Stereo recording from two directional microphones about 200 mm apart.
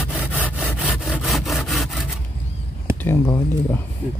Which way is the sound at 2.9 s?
10° left (ahead or behind).